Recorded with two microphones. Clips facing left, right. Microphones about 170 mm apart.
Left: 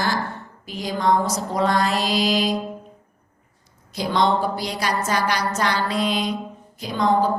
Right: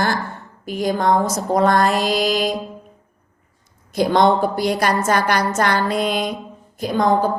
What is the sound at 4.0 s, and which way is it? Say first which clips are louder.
A woman's voice: right 5 dB; 50° right (ahead or behind).